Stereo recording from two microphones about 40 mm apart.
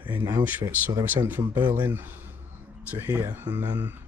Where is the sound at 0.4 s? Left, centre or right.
Right.